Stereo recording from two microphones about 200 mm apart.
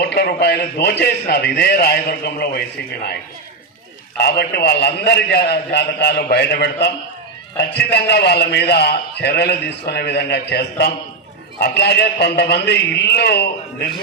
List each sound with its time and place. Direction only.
0.0 s a man's voice: 55° left (ahead or behind)
4.2 s a man's voice: 55° left (ahead or behind)